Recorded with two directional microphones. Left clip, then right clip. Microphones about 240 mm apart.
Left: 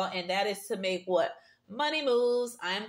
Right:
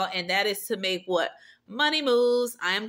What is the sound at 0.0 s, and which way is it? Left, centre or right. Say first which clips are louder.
Speech: right 4 dB; right.